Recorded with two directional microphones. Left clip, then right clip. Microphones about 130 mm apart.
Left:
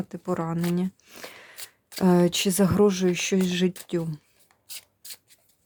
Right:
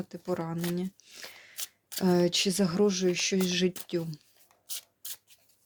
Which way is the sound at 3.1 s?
40° left (ahead or behind).